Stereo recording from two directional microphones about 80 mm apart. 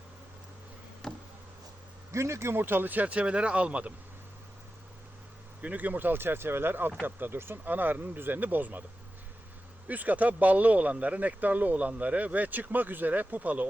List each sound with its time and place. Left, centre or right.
1.0 s a sound: centre
2.1 s speech: right; by 3.9 s centre
5.6 s speech: right
9.8 s speech: right